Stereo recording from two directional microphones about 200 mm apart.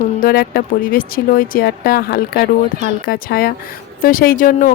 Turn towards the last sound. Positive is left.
turn(degrees=45)  # may be behind; listen again after turning